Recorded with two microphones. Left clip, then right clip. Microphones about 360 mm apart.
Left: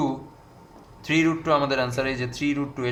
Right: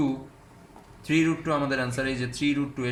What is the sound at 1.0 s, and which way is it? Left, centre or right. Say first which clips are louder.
Speech: left 3 dB; left.